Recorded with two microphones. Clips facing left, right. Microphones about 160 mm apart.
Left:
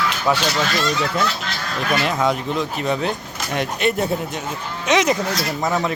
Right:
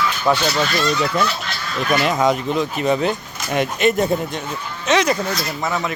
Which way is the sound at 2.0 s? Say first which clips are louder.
Right 4 dB; centre (ahead or behind).